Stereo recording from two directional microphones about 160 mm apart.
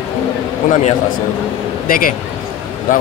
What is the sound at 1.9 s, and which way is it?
Speech, 60° left (ahead or behind).